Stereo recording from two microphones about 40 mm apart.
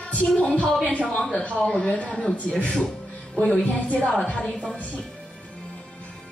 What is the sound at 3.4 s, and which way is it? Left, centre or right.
A man's voice, left.